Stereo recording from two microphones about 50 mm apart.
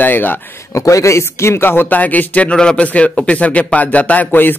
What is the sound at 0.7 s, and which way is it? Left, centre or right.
Speech, left.